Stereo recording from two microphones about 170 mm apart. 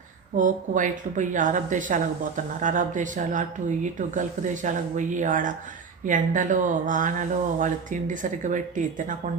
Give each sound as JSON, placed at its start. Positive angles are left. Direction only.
{"t": 0.3, "sound": "speech", "side_deg": -50}